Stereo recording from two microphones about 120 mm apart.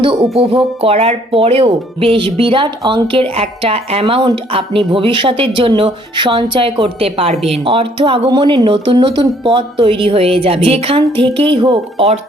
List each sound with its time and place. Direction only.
0.2 s speech: 55° right (ahead or behind)
8.3 s a woman's voice: 35° right (ahead or behind)
8.6 s speech: 50° right (ahead or behind)